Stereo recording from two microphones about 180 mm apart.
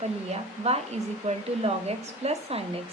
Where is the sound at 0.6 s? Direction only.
35° right (ahead or behind).